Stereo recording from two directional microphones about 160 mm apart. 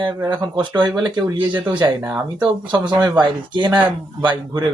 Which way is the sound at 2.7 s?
30° right (ahead or behind).